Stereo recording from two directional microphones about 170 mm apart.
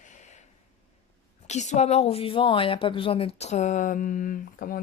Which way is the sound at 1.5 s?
40° left (ahead or behind).